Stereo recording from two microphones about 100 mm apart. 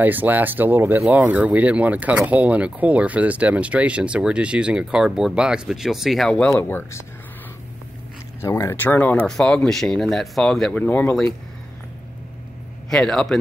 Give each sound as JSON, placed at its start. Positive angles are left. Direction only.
{"t": 0.0, "sound": "speech", "side_deg": -20}
{"t": 6.2, "sound": "speech", "side_deg": 10}
{"t": 8.4, "sound": "speech", "side_deg": 30}
{"t": 8.8, "sound": "speech", "side_deg": 15}
{"t": 12.9, "sound": "speech", "side_deg": 5}